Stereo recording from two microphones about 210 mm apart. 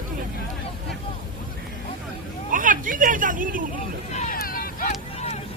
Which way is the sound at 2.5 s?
40° right (ahead or behind).